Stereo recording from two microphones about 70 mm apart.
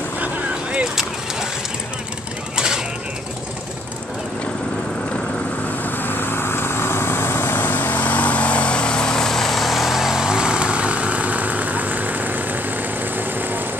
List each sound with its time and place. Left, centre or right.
0.2 s vehicle: centre
2.5 s a sound: centre
5.9 s vehicle: left; by 13.6 s right